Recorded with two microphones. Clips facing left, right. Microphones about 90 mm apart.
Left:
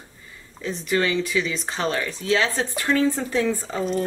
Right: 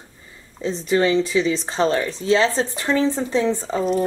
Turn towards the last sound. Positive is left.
turn(degrees=-25)  # may be behind; listen again after turning